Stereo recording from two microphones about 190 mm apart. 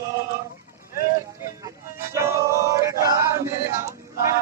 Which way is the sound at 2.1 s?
15° right (ahead or behind).